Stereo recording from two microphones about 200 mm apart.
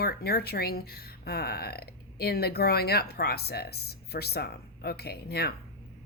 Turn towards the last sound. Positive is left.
turn(degrees=50)  # may be behind; listen again after turning